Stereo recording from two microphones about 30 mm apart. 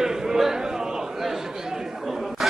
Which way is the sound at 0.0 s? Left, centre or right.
Centre.